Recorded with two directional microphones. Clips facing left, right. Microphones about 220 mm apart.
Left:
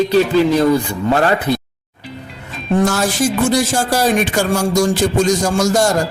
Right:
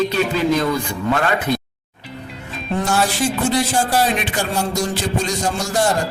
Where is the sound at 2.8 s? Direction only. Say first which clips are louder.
Left 2 dB; 45° left (ahead or behind).